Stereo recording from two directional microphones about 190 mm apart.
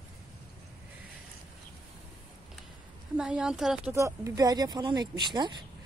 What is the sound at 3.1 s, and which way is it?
Speech, 5° right (ahead or behind).